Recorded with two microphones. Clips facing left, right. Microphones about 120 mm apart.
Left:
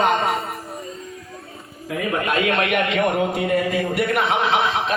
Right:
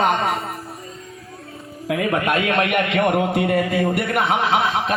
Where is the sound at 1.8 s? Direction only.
55° right (ahead or behind).